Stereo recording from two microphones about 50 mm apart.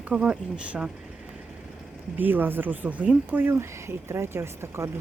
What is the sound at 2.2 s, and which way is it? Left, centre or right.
Speech, right.